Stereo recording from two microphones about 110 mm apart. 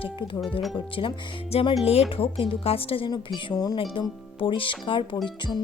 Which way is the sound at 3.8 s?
50° left (ahead or behind).